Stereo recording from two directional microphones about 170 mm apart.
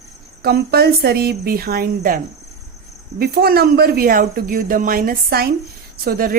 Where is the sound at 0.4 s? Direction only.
70° right (ahead or behind).